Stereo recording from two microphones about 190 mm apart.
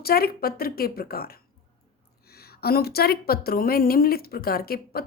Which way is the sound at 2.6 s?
55° left (ahead or behind).